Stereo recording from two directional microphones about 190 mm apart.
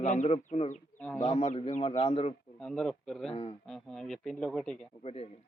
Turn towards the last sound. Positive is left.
turn(degrees=30)  # may be behind; listen again after turning